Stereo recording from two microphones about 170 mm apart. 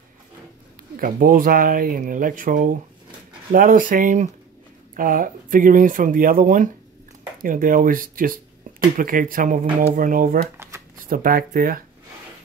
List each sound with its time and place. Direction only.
0.9 s speech: 55° right (ahead or behind)